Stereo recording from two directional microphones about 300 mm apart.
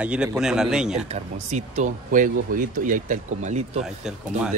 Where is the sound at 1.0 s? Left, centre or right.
Right.